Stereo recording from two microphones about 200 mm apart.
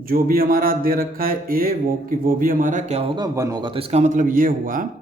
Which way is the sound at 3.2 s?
20° right (ahead or behind).